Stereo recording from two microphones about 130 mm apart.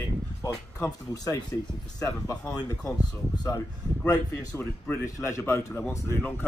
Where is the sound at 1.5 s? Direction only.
20° left (ahead or behind).